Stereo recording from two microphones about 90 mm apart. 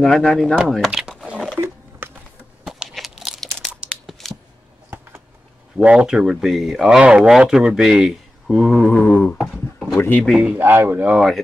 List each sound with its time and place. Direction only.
0.0 s speech: centre (ahead or behind)
1.0 s crumpling: 10° right (ahead or behind)
1.6 s a sound: 25° right (ahead or behind)
2.9 s crumpling: centre (ahead or behind)
3.8 s tearing: centre (ahead or behind)
5.8 s speech: 10° right (ahead or behind)
8.8 s a sound: 15° left (ahead or behind)
9.2 s speech: 5° left (ahead or behind)
9.9 s speech: 25° left (ahead or behind)
10.6 s speech: 25° right (ahead or behind)
11.1 s speech: 5° right (ahead or behind)